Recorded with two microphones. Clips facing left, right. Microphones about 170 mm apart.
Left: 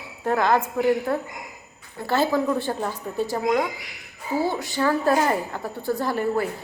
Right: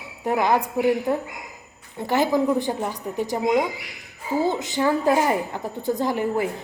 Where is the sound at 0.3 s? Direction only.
15° right (ahead or behind).